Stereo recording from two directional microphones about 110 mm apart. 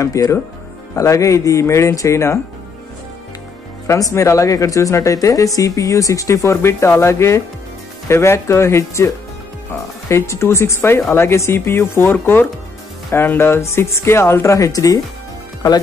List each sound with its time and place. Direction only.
0.0 s speech: 30° left (ahead or behind)
3.8 s speech: 25° left (ahead or behind)